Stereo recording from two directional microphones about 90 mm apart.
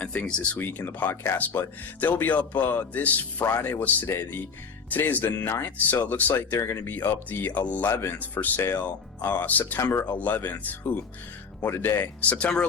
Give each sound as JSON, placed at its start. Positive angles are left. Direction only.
{"t": 0.0, "sound": "speech", "side_deg": 15}
{"t": 12.2, "sound": "speech", "side_deg": 15}